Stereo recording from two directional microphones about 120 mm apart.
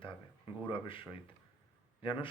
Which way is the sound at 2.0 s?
45° left (ahead or behind).